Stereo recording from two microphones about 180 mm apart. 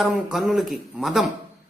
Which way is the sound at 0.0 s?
Centre (ahead or behind).